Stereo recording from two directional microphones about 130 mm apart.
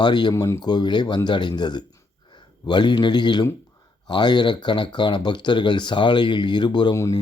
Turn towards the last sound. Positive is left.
turn(degrees=35)  # may be behind; listen again after turning